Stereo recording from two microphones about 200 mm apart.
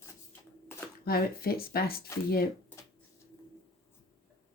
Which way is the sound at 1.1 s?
50° left (ahead or behind).